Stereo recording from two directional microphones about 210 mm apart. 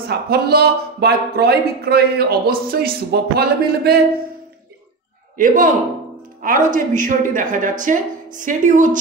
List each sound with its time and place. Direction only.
0.1 s speech: 50° right (ahead or behind)
5.4 s a woman's voice: 40° right (ahead or behind)